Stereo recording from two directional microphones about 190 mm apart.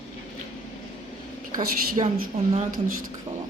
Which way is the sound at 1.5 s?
45° right (ahead or behind).